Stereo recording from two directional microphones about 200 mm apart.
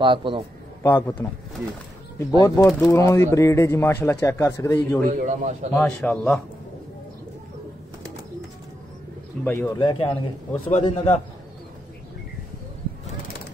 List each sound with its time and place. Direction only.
0.0 s a man's voice: 25° right (ahead or behind)
0.8 s speech: 15° left (ahead or behind)
2.4 s speech: 15° left (ahead or behind)
5.1 s a man's voice: 35° right (ahead or behind)
5.8 s speech: 10° left (ahead or behind)
9.4 s speech: 10° left (ahead or behind)
9.8 s a man's voice: 25° left (ahead or behind)